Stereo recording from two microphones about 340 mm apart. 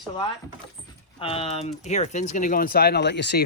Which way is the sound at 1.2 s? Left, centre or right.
Centre.